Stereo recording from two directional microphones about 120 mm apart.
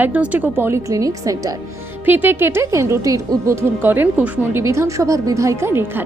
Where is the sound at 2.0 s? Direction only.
15° right (ahead or behind).